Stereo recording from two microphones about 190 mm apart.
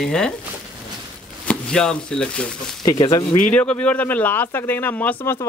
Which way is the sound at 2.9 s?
20° left (ahead or behind).